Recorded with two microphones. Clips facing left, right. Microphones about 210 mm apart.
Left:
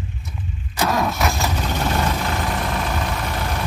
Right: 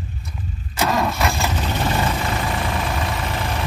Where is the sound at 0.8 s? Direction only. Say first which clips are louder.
Even; centre (ahead or behind).